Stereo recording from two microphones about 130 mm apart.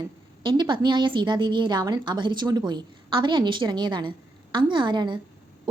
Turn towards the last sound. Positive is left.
turn(degrees=-35)  # may be behind; listen again after turning